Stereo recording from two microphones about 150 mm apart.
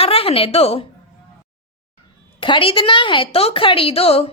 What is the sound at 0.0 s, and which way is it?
Speech, 40° left (ahead or behind).